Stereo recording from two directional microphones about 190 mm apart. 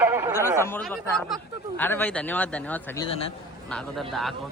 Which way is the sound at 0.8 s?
Centre (ahead or behind).